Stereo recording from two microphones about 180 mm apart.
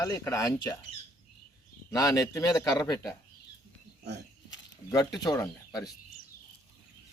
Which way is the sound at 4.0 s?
65° right (ahead or behind).